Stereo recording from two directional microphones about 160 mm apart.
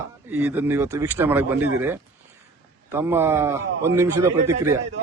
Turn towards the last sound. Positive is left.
turn(degrees=-15)  # may be behind; listen again after turning